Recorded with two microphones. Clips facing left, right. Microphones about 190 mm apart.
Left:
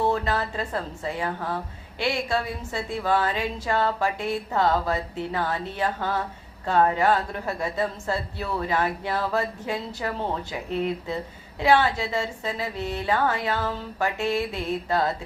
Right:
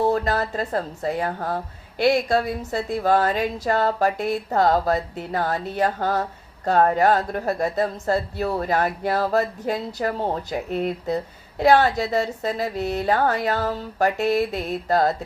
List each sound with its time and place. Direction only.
0.0 s speech: 40° right (ahead or behind)